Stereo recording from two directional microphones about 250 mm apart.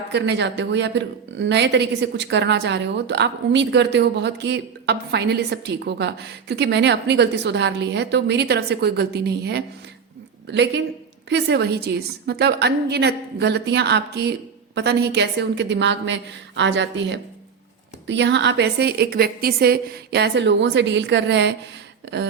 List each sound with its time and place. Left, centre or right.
0.1 s a woman's voice: right